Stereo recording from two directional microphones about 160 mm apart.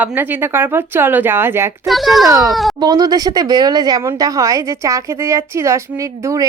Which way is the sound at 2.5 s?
Centre (ahead or behind).